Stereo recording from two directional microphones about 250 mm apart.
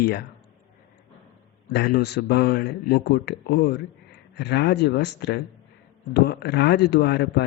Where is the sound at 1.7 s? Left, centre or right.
Left.